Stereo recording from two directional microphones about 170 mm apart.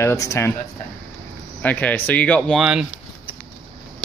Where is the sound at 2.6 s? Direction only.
5° right (ahead or behind).